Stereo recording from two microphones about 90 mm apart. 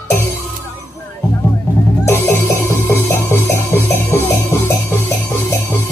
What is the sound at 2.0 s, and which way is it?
Music, 30° left (ahead or behind).